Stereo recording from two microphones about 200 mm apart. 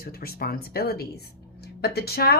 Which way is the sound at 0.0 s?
50° left (ahead or behind).